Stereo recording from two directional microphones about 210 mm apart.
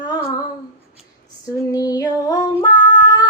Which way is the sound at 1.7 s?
15° left (ahead or behind).